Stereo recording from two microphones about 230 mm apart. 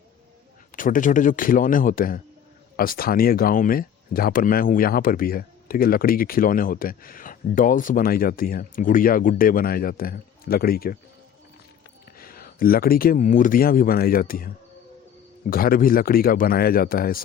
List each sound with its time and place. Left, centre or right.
0.8 s speech: left
12.1 s speech: left